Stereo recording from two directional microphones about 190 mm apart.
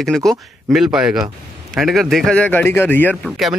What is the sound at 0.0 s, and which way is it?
A man's voice, centre (ahead or behind).